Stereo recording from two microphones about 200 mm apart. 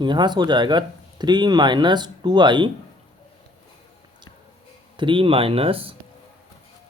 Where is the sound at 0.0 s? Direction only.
20° right (ahead or behind).